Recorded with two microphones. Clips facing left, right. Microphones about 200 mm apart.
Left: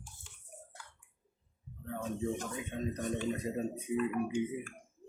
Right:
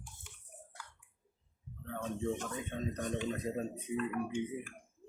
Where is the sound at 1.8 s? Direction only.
5° left (ahead or behind).